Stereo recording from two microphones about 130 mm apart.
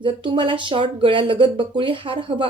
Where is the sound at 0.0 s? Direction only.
40° right (ahead or behind).